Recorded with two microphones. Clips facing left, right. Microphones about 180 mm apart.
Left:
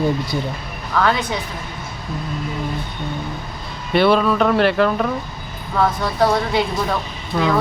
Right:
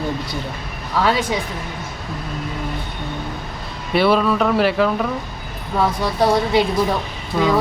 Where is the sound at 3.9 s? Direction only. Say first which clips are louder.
Left 1 dB; 5° right (ahead or behind).